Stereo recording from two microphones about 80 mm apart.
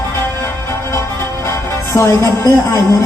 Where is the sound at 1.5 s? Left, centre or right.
Left.